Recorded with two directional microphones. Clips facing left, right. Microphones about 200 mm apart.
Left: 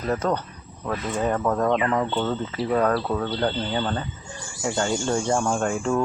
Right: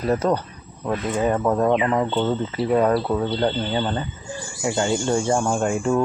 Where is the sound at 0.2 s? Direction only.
10° right (ahead or behind).